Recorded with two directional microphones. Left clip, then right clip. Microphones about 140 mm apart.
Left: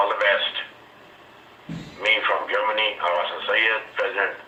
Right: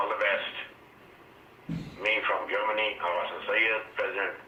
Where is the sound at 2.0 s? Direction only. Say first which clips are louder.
Left 7 dB; 30° left (ahead or behind).